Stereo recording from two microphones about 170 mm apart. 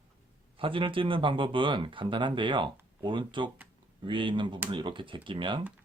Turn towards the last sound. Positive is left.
turn(degrees=-30)  # may be behind; listen again after turning